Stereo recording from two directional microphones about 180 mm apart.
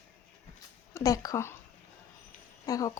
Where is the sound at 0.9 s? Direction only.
20° left (ahead or behind).